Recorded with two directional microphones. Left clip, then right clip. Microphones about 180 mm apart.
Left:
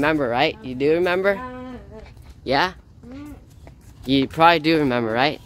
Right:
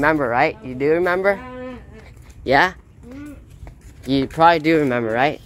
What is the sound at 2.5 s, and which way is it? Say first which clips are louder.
Speech: right 5 dB; 10° right (ahead or behind).